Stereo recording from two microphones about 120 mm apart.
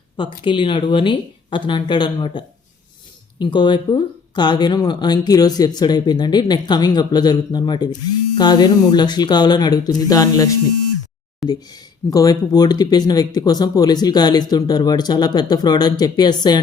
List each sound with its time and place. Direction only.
0.2 s speech: 40° left (ahead or behind)